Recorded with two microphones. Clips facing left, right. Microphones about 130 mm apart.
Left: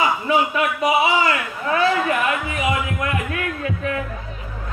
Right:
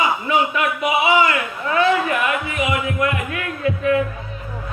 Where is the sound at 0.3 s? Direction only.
35° left (ahead or behind).